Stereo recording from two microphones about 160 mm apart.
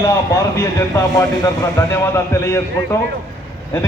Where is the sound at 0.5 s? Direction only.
20° left (ahead or behind).